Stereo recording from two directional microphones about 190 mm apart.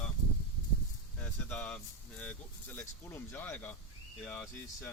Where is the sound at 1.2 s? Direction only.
10° left (ahead or behind).